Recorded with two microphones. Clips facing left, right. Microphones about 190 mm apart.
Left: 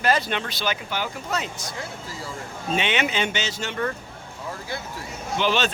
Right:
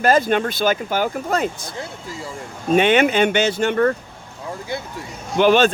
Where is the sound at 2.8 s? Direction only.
50° right (ahead or behind).